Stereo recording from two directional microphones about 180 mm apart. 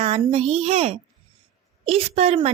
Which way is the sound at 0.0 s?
35° right (ahead or behind).